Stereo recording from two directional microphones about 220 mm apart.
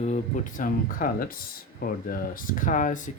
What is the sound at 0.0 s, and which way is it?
Speech, 30° left (ahead or behind).